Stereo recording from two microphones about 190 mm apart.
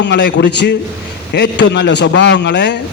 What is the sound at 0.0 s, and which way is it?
A man's voice, 65° left (ahead or behind).